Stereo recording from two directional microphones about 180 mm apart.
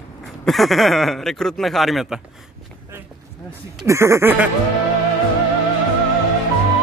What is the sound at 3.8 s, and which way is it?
Speech, 15° right (ahead or behind).